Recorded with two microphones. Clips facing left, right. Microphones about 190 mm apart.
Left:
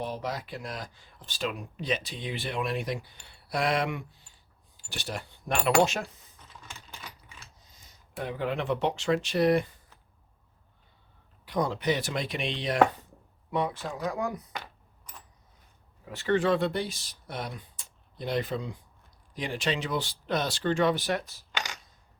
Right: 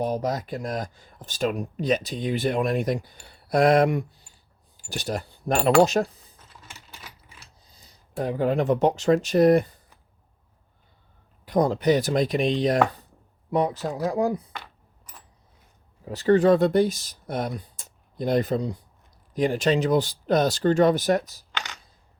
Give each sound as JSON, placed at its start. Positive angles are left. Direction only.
{"t": 0.0, "sound": "speech", "side_deg": -40}
{"t": 7.6, "sound": "speech", "side_deg": -35}
{"t": 11.4, "sound": "speech", "side_deg": -45}
{"t": 16.0, "sound": "speech", "side_deg": -40}